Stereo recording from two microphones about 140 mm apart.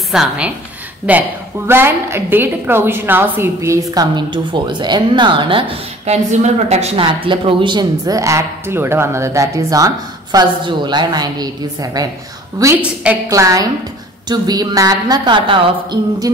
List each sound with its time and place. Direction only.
0.1 s a woman's voice: 5° right (ahead or behind); by 5.7 s 35° right (ahead or behind)
6.0 s a woman's voice: 55° right (ahead or behind)
7.1 s speech: 40° right (ahead or behind)
12.8 s a woman's voice: 10° right (ahead or behind)
13.3 s speech: 25° right (ahead or behind)